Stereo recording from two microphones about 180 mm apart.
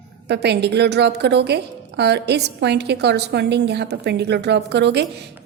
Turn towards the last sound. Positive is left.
turn(degrees=-70)  # may be behind; listen again after turning